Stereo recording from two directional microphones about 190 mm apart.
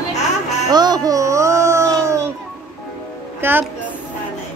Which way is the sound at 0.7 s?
20° right (ahead or behind).